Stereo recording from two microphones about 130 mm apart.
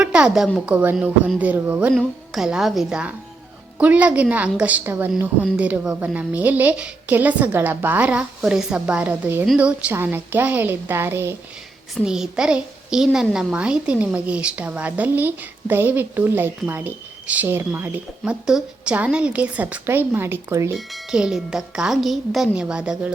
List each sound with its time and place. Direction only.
0.0 s a woman's voice: 5° right (ahead or behind)
12.0 s a woman's voice: 5° right (ahead or behind); by 20.7 s 20° right (ahead or behind)
20.7 s speech: 5° right (ahead or behind)